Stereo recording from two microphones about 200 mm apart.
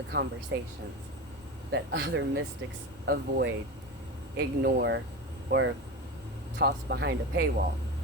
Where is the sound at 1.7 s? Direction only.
60° right (ahead or behind).